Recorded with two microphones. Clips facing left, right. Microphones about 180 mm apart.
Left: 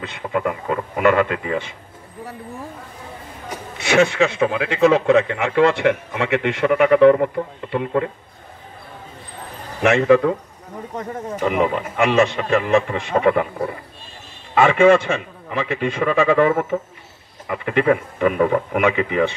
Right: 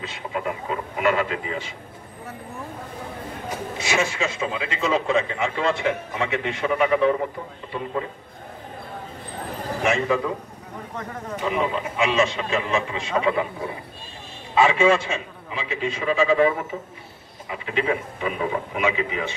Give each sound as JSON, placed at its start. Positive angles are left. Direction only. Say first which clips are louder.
{"t": 0.0, "sound": "a man's voice", "louder": "left 6 dB", "side_deg": 55}
{"t": 3.7, "sound": "a man's voice", "louder": "left 9 dB", "side_deg": 65}
{"t": 9.8, "sound": "a man's voice", "louder": "left 8 dB", "side_deg": 70}
{"t": 12.0, "sound": "a man's voice", "louder": "left 5 dB", "side_deg": 60}
{"t": 14.5, "sound": "a man's voice", "louder": "left 5 dB", "side_deg": 60}